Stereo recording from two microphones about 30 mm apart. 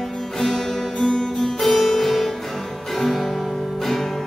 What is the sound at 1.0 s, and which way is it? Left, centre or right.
Music, centre.